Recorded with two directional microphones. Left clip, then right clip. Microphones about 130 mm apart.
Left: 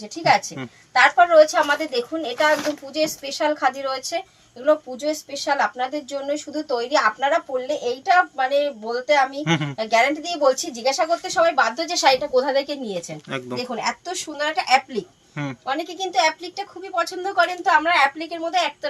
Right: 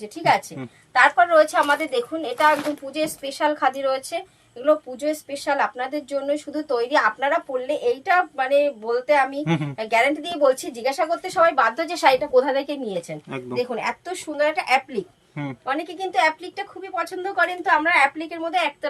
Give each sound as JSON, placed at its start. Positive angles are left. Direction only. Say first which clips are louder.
{"t": 0.9, "sound": "a woman's voice", "louder": "left 2 dB", "side_deg": -15}
{"t": 5.3, "sound": "a woman's voice", "louder": "left 2 dB", "side_deg": -10}